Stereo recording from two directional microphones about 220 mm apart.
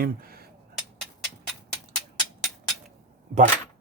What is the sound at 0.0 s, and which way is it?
Speech, 45° right (ahead or behind).